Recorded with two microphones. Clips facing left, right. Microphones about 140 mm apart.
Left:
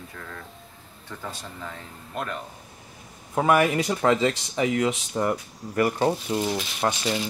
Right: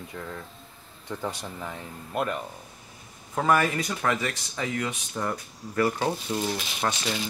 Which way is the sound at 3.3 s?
15° left (ahead or behind).